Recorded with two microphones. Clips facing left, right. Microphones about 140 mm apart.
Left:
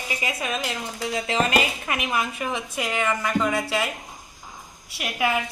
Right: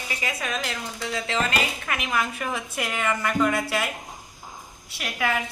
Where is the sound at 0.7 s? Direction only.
35° left (ahead or behind).